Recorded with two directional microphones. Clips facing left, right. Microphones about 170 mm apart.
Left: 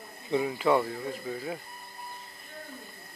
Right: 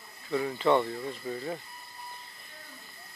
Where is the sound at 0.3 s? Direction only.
10° left (ahead or behind).